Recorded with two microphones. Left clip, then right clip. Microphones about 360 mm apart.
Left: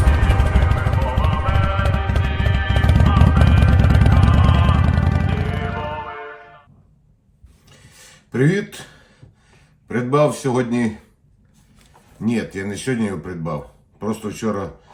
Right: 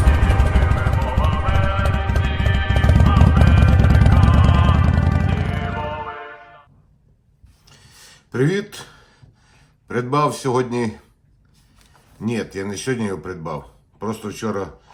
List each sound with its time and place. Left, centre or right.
0.0 s music: centre
8.3 s speech: centre
9.9 s speech: centre
12.2 s speech: centre